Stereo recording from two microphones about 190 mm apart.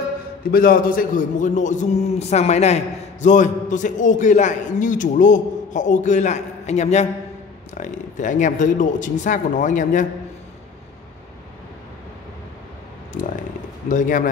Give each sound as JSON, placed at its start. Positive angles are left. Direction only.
{"t": 0.5, "sound": "a man's voice", "side_deg": 50}
{"t": 13.1, "sound": "speech", "side_deg": 40}